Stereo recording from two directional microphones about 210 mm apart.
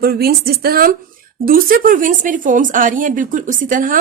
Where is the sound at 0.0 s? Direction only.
45° right (ahead or behind).